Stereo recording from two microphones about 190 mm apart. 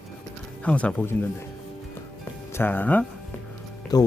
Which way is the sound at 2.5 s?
10° left (ahead or behind).